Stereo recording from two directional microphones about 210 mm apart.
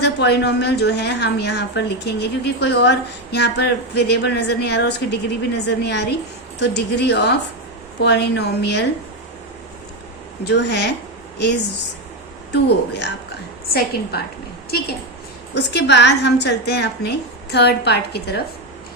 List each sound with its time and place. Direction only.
0.0 s a woman's voice: 50° left (ahead or behind)
10.4 s a woman's voice: 55° left (ahead or behind)
15.5 s a woman's voice: 55° left (ahead or behind)